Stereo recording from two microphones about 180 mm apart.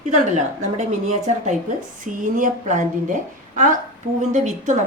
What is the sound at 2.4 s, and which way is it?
Speech, 45° right (ahead or behind).